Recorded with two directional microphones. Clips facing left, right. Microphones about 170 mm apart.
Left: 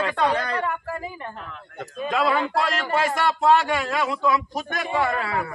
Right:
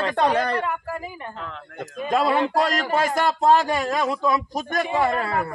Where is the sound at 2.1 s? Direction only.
40° right (ahead or behind).